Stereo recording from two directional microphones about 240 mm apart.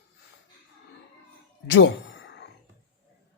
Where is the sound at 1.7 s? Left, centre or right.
Left.